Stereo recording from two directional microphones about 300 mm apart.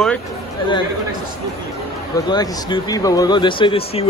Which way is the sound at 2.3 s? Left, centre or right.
Centre.